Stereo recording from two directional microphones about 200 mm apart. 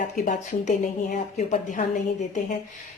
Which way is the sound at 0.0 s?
40° left (ahead or behind).